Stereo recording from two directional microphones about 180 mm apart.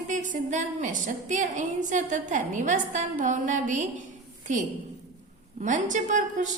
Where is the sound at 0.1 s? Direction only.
45° right (ahead or behind).